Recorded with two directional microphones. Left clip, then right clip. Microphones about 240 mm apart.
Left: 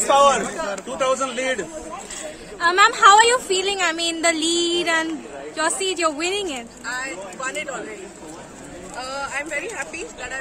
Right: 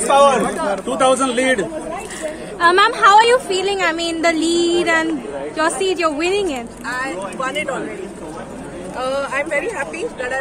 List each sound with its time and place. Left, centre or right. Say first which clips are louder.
0.1 s a woman's voice: right 3 dB; centre
0.9 s a man's voice: right 6 dB; right
2.6 s a woman's voice: right 3 dB; centre
3.0 s a woman's voice: right 2 dB; centre
9.0 s speech: right 8 dB; centre